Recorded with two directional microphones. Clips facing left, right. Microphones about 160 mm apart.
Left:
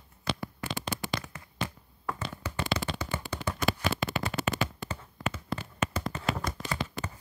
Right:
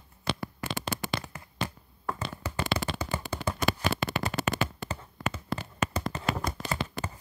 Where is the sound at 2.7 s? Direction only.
35° right (ahead or behind).